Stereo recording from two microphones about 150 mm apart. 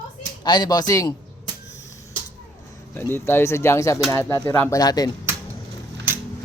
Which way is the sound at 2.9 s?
15° left (ahead or behind).